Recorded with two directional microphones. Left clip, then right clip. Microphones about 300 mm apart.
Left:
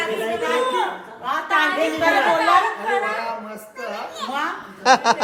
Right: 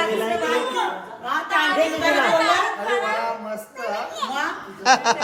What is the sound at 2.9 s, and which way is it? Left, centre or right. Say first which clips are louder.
A man's voice: even; centre.